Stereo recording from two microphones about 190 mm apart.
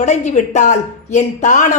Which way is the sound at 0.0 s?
40° left (ahead or behind).